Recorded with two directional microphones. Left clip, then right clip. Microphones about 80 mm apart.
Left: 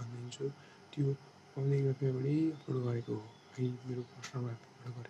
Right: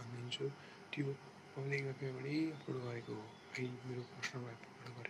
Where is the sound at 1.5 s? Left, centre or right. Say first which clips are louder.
Left 6 dB; left.